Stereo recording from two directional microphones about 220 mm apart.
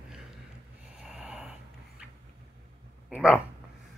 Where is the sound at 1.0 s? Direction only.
Centre (ahead or behind).